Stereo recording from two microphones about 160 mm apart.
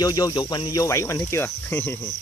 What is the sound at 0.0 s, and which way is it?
Cricket, 25° left (ahead or behind).